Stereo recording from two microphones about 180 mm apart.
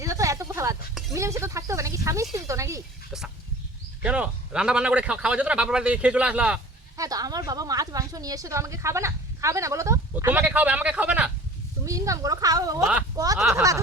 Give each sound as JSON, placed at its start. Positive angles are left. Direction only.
{"t": 0.0, "sound": "a sound", "side_deg": -15}
{"t": 1.1, "sound": "a woman's voice", "side_deg": -15}
{"t": 4.0, "sound": "a woman's voice", "side_deg": -5}
{"t": 6.9, "sound": "a woman's voice", "side_deg": -20}